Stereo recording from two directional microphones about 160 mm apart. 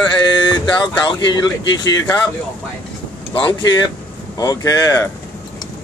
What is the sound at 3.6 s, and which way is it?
Speech, 25° left (ahead or behind).